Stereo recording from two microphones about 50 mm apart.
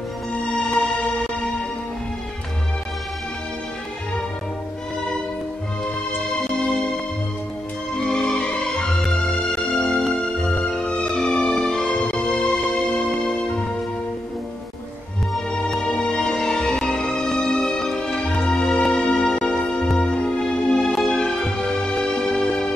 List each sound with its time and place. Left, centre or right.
0.3 s music: centre
6.6 s music: centre
7.9 s music: centre
15.5 s music: centre
20.9 s music: centre